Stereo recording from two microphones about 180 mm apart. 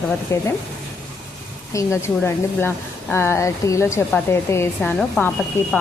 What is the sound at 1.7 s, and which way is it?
Speech, 15° left (ahead or behind).